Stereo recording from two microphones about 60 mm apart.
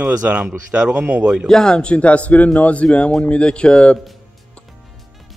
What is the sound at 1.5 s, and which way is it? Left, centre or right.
A man's voice, centre.